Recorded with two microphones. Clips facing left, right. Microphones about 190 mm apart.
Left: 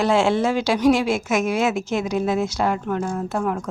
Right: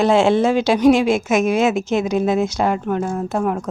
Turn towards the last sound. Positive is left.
turn(degrees=-25)  # may be behind; listen again after turning